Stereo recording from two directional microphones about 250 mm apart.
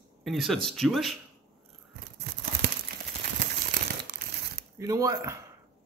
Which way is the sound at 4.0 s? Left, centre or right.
Right.